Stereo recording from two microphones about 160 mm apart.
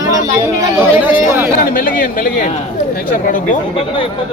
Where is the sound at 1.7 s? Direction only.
60° left (ahead or behind).